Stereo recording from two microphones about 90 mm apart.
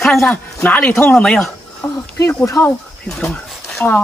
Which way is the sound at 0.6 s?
20° left (ahead or behind).